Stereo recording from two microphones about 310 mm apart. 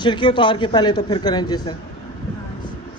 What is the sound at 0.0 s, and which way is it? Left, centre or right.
A man's voice, centre.